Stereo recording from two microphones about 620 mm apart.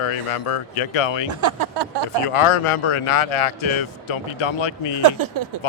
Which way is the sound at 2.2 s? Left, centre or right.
Left.